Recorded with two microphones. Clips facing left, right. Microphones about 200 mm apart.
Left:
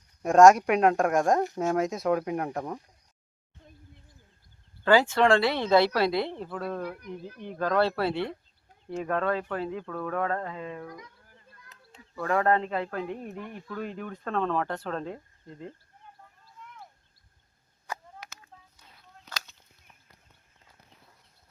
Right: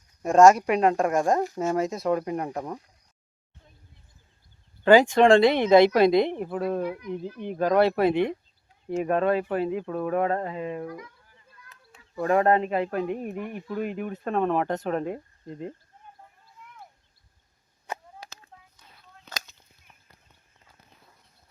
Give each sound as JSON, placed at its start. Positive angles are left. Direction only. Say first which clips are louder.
{"t": 0.2, "sound": "speech", "louder": "right 1 dB", "side_deg": 0}
{"t": 4.8, "sound": "speech", "louder": "right 5 dB", "side_deg": -20}
{"t": 12.1, "sound": "speech", "louder": "right 4 dB", "side_deg": -20}
{"t": 17.8, "sound": "chop", "louder": "right 2 dB", "side_deg": -30}